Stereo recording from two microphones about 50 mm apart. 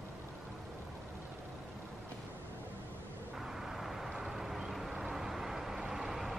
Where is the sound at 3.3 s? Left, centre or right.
Centre.